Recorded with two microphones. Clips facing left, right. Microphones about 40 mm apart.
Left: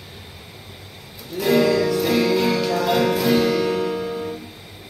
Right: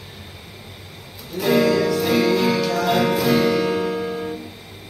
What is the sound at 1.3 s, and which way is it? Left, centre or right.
Music, centre.